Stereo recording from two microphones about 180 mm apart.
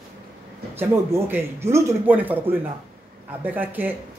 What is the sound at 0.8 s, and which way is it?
A man's voice, 10° right (ahead or behind).